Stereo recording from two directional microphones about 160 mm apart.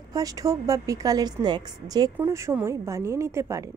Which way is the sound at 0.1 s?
20° right (ahead or behind).